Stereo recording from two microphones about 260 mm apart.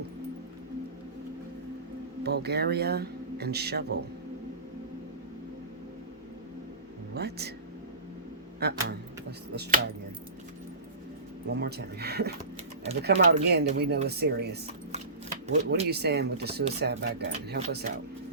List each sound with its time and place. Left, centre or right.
2.2 s speech: right
7.1 s speech: right
8.5 s speech: right
11.4 s speech: right
15.7 s speech: right